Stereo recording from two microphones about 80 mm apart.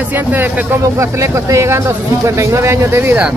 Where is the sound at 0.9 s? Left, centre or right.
Right.